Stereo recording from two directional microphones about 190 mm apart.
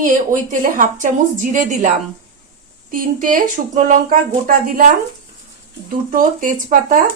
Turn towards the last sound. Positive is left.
turn(degrees=-45)  # may be behind; listen again after turning